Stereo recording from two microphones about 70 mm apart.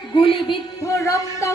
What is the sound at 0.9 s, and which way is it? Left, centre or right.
Speech, left.